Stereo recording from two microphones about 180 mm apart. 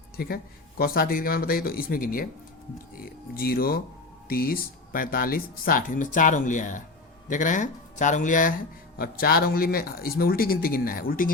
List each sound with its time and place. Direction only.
0.2 s speech: 60° left (ahead or behind)